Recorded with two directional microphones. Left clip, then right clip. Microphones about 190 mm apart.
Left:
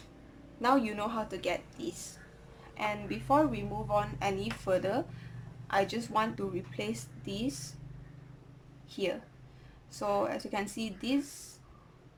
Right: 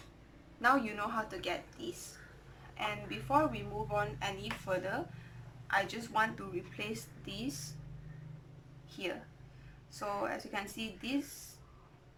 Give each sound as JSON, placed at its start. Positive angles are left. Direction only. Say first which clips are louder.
{"t": 0.6, "sound": "speech", "louder": "left 2 dB", "side_deg": 20}
{"t": 9.0, "sound": "speech", "louder": "left 6 dB", "side_deg": 20}